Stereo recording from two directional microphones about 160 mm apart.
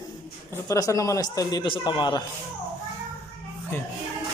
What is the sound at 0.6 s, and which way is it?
A man's voice, 20° left (ahead or behind).